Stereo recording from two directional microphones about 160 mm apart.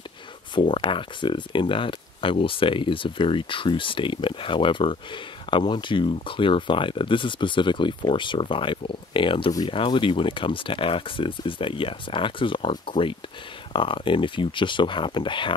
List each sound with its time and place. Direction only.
0.6 s speech: 30° left (ahead or behind)